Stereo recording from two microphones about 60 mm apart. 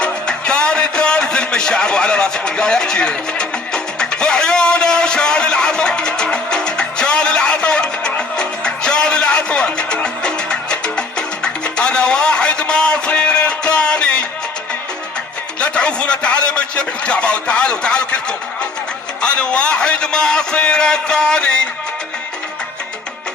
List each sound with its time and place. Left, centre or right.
0.0 s music: centre
15.6 s a sound: centre
19.2 s a man's voice: centre